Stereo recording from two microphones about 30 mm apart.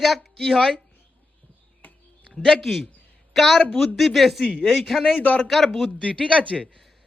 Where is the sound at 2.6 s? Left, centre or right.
Centre.